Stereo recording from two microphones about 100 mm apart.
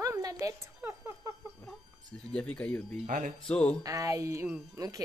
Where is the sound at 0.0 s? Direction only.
35° right (ahead or behind).